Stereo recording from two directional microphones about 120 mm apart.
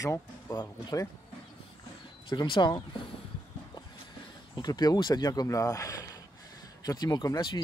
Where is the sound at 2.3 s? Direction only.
40° left (ahead or behind).